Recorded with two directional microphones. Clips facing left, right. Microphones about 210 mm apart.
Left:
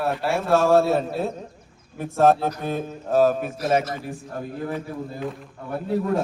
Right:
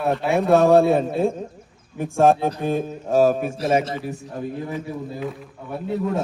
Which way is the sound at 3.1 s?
10° right (ahead or behind).